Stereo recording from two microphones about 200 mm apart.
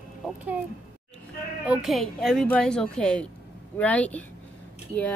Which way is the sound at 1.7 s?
Centre (ahead or behind).